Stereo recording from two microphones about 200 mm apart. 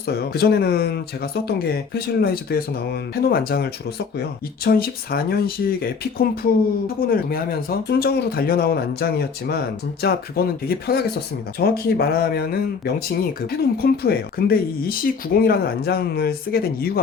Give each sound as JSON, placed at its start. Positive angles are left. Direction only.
{"t": 0.1, "sound": "speech", "side_deg": 50}